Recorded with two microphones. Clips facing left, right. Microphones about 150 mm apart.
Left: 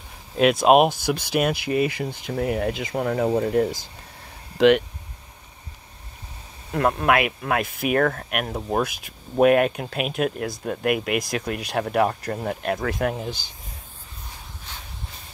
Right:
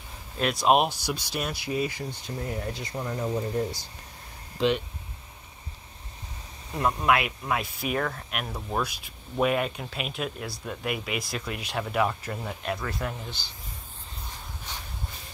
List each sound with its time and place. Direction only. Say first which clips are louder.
0.6 s speech: left 4 dB; 55° left (ahead or behind)
1.3 s speech: left 9 dB; 65° left (ahead or behind)
6.7 s speech: left 4 dB; 65° left (ahead or behind); by 13.5 s 45° left (ahead or behind)